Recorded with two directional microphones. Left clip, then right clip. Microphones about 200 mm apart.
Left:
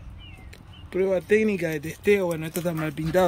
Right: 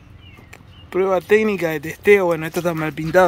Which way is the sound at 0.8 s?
5° left (ahead or behind).